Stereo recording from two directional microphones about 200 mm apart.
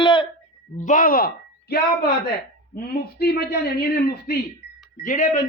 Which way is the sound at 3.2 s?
50° left (ahead or behind).